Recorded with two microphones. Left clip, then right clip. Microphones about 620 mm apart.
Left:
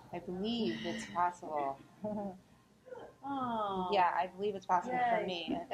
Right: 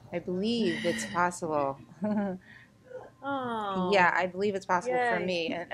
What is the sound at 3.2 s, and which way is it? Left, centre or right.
Speech, right.